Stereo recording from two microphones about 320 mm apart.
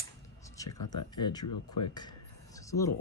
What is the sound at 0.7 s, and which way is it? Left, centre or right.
Speech, left.